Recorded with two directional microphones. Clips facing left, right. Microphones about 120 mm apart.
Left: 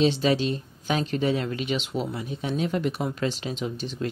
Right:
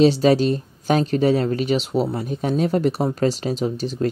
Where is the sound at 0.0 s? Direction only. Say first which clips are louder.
Right 7 dB; 40° right (ahead or behind).